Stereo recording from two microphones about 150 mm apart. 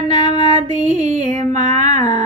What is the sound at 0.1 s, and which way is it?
Female singing, 50° right (ahead or behind).